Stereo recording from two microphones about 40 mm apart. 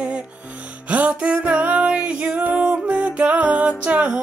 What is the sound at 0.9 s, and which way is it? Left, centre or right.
Music, right.